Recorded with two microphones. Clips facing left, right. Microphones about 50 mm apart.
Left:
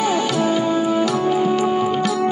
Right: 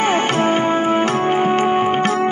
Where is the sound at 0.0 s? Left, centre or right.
Right.